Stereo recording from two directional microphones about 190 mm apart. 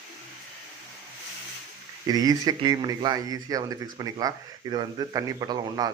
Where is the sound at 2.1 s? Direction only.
20° right (ahead or behind).